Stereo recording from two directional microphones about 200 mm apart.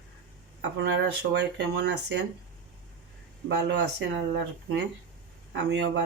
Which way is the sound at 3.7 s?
60° right (ahead or behind).